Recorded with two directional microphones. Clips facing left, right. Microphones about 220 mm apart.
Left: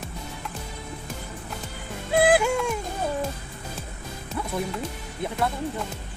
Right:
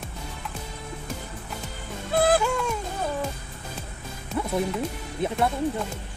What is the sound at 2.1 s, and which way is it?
Music, 10° left (ahead or behind).